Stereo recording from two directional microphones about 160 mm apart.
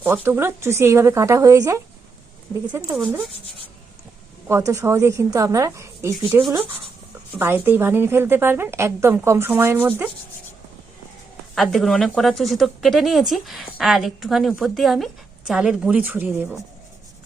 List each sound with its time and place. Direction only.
0.0 s a woman's voice: 15° right (ahead or behind)
4.4 s a woman's voice: 20° right (ahead or behind)
11.5 s a woman's voice: centre (ahead or behind)